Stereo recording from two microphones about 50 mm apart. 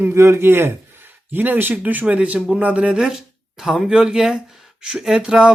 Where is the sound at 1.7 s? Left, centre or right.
Right.